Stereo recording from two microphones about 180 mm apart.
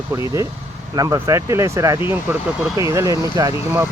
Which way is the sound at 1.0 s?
20° right (ahead or behind).